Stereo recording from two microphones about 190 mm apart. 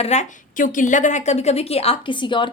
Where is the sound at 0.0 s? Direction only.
35° left (ahead or behind).